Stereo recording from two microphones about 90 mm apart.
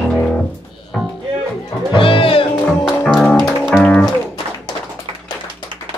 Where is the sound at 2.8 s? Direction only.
10° left (ahead or behind).